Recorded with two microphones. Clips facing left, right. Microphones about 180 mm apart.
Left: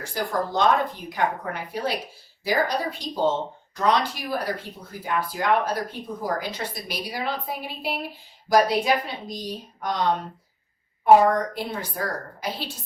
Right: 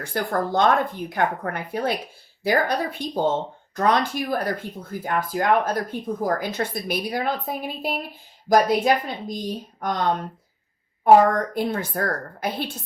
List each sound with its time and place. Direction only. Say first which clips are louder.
0.0 s speech: right 2 dB; 55° right (ahead or behind)